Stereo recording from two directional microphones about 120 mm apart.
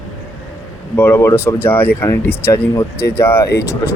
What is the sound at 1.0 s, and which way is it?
Speech, 20° left (ahead or behind).